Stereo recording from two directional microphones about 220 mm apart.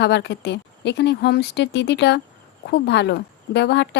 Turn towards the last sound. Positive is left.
turn(degrees=50)  # may be behind; listen again after turning